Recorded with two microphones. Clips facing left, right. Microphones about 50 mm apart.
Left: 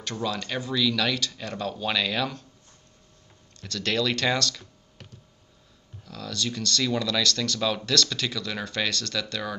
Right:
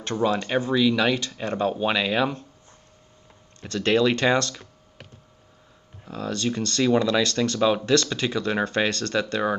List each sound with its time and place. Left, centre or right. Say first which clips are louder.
0.0 s speech: right 7 dB; right
3.6 s speech: right 6 dB; right
6.0 s speech: right 5 dB; right